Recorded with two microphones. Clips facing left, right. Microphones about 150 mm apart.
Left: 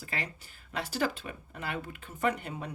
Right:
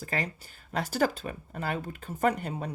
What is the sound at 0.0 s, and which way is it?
Speech, 45° right (ahead or behind).